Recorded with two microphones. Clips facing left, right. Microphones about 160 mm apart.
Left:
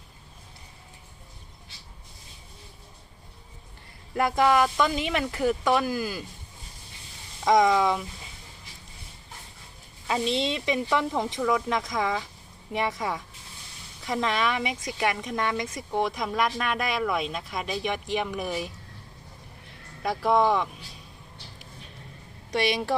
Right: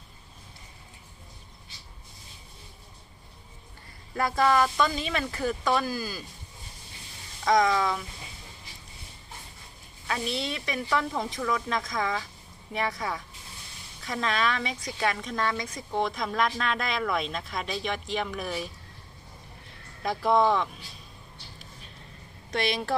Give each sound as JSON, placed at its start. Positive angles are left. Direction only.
{"t": 4.1, "sound": "speech", "side_deg": 15}
{"t": 7.4, "sound": "speech", "side_deg": 20}
{"t": 10.1, "sound": "speech", "side_deg": 25}
{"t": 20.0, "sound": "speech", "side_deg": 10}
{"t": 22.5, "sound": "speech", "side_deg": 15}